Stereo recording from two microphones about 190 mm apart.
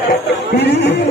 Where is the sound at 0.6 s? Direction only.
60° left (ahead or behind).